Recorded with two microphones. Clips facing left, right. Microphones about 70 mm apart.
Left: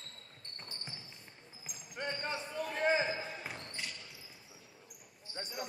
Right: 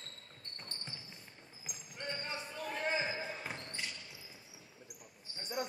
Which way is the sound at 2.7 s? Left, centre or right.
Left.